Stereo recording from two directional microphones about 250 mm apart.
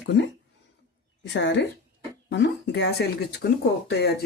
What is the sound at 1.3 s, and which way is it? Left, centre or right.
A woman's voice, left.